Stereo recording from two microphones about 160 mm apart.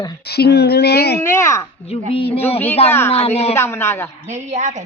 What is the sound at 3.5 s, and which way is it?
Speech, 15° left (ahead or behind).